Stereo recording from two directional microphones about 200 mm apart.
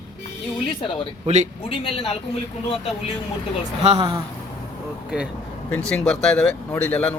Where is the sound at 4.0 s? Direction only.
20° right (ahead or behind).